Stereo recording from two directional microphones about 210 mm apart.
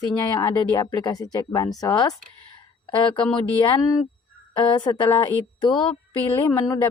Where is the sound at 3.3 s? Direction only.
20° left (ahead or behind).